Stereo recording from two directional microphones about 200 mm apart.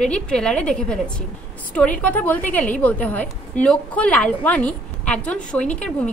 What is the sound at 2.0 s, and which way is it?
A woman's voice, 10° left (ahead or behind).